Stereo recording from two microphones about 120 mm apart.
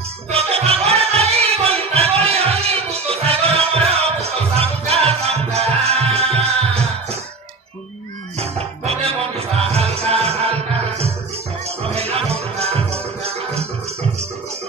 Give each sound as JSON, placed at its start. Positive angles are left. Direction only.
{"t": 0.3, "sound": "music", "side_deg": -55}
{"t": 8.4, "sound": "music", "side_deg": -55}
{"t": 11.8, "sound": "music", "side_deg": -55}